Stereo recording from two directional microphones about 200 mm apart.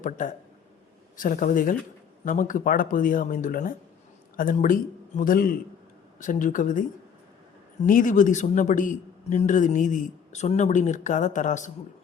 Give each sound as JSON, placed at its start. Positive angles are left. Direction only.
{"t": 0.0, "sound": "a man's voice", "side_deg": 40}
{"t": 7.9, "sound": "a man's voice", "side_deg": 40}